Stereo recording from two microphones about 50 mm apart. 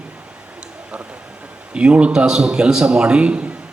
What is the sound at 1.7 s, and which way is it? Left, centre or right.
Speech, right.